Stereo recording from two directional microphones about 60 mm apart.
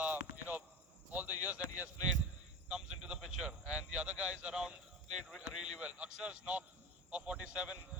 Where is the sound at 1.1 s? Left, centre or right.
Right.